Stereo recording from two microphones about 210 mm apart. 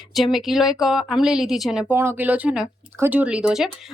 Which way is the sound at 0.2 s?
Centre (ahead or behind).